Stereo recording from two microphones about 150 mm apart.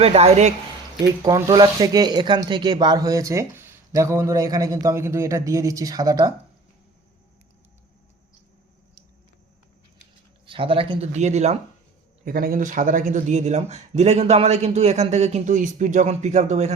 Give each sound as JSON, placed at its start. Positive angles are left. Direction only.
{"t": 0.0, "sound": "speech", "side_deg": -45}
{"t": 1.2, "sound": "speech", "side_deg": -25}
{"t": 10.4, "sound": "speech", "side_deg": -35}
{"t": 12.2, "sound": "speech", "side_deg": -85}